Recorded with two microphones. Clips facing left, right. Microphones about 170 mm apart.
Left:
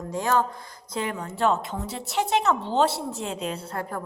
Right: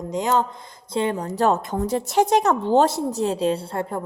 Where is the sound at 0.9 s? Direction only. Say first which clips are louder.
Right 6 dB; 30° right (ahead or behind).